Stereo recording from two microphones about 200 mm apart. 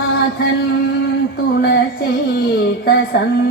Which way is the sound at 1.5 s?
55° left (ahead or behind).